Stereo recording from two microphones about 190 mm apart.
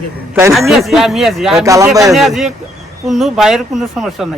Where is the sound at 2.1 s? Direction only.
Centre (ahead or behind).